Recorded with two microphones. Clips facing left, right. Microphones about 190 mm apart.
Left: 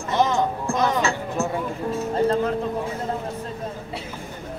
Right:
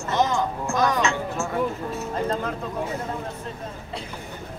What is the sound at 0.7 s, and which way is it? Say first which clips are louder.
Music: right 2 dB; 35° left (ahead or behind).